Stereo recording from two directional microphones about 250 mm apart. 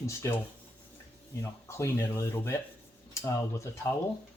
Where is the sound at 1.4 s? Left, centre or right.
Centre.